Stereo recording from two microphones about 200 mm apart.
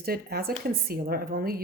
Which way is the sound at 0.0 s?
50° right (ahead or behind).